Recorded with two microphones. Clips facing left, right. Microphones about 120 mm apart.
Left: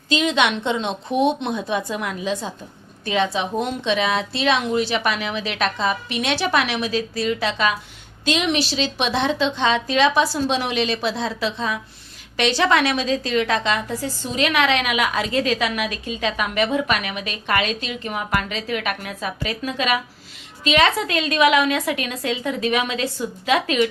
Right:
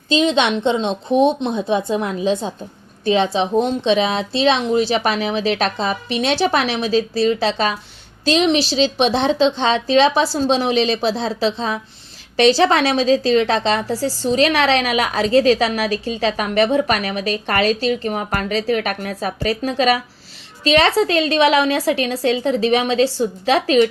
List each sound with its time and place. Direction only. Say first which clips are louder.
0.1 s a woman's voice: right 3 dB; 25° right (ahead or behind)